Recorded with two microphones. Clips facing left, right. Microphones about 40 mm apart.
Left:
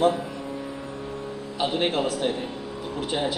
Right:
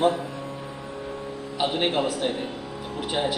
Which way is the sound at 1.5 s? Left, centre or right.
Centre.